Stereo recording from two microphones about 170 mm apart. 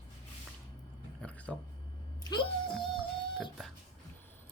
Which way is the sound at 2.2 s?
25° left (ahead or behind).